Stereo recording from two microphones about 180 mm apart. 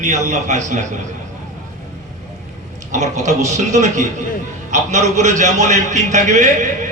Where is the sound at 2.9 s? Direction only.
40° right (ahead or behind).